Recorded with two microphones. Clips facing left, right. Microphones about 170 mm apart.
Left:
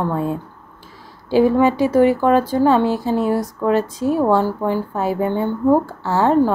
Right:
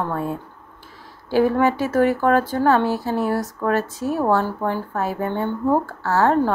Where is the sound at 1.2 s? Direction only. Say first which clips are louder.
Left 3 dB; 15° left (ahead or behind).